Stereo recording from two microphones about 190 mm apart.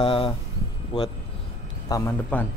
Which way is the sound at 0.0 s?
30° left (ahead or behind).